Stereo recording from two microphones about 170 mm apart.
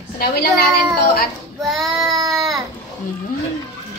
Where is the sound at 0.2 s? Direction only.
60° left (ahead or behind).